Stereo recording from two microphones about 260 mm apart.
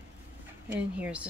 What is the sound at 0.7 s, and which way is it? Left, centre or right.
Speech, centre.